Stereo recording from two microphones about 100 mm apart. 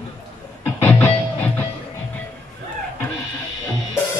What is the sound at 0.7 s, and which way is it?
Music, 20° left (ahead or behind).